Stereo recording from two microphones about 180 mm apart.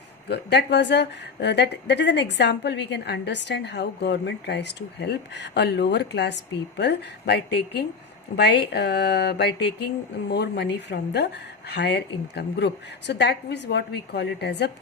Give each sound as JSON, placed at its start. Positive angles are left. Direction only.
{"t": 0.3, "sound": "a woman's voice", "side_deg": 70}